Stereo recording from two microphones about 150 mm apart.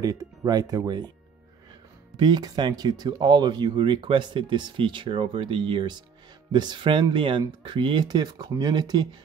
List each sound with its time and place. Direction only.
0.0 s speech: 25° right (ahead or behind)
2.1 s speech: 30° right (ahead or behind)